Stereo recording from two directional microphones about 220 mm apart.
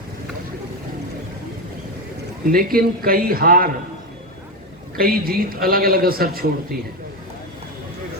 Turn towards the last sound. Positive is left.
turn(degrees=-45)  # may be behind; listen again after turning